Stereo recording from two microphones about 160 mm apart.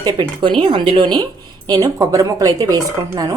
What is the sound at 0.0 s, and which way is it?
A woman's voice, 30° right (ahead or behind).